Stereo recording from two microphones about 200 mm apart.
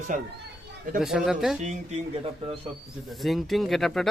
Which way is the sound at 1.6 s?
35° right (ahead or behind).